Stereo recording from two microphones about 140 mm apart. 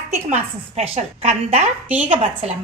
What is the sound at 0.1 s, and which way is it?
A woman's voice, 50° right (ahead or behind).